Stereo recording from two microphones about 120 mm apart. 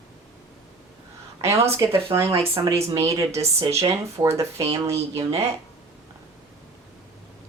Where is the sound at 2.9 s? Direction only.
25° right (ahead or behind).